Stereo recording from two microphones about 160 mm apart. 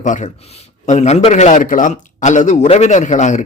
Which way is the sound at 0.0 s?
50° left (ahead or behind).